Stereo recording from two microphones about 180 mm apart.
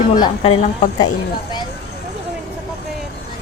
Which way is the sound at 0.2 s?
25° left (ahead or behind).